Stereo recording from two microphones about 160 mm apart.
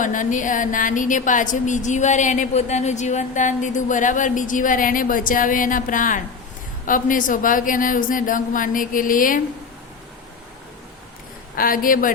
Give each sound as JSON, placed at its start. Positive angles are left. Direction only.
{"t": 0.0, "sound": "a woman's voice", "side_deg": 55}
{"t": 11.5, "sound": "a woman's voice", "side_deg": 60}